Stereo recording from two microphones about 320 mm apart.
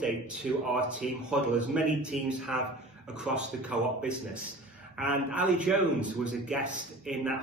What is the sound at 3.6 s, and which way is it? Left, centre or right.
Speech, centre.